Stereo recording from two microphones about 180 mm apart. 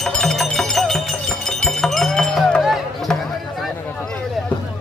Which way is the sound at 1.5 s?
Centre (ahead or behind).